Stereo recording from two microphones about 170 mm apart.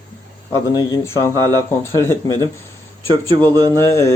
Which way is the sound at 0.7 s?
20° left (ahead or behind).